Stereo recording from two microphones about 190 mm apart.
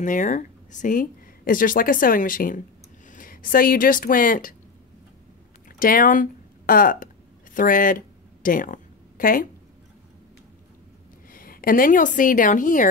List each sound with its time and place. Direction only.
0.0 s speech: 45° left (ahead or behind)
5.7 s speech: 45° left (ahead or behind)
7.5 s a sound: 45° left (ahead or behind)
11.2 s a woman's voice: 50° left (ahead or behind)